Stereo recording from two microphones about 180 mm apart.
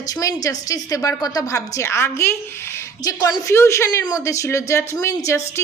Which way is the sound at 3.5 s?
15° left (ahead or behind).